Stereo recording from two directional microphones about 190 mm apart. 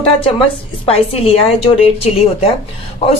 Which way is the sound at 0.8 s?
30° left (ahead or behind).